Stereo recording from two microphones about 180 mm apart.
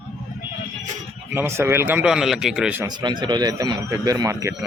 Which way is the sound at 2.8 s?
25° right (ahead or behind).